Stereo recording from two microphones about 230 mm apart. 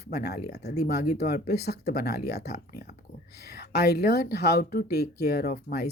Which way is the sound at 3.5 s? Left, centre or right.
Left.